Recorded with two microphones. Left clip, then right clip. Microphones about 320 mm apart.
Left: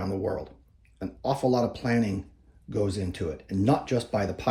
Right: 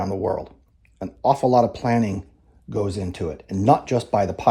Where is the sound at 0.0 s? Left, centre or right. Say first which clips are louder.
Right 6 dB; right.